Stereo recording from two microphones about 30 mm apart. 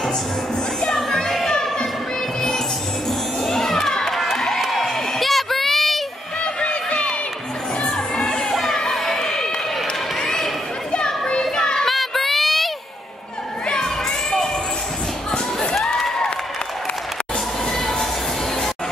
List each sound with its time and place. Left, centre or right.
0.8 s music: centre
3.4 s children playing: centre
4.8 s a sound: centre
6.4 s music: left
7.8 s crowd: centre
9.2 s run: centre
10.2 s a sound: centre
11.2 s children playing: left
11.9 s a sound: centre
13.7 s children shouting: left
17.7 s music: centre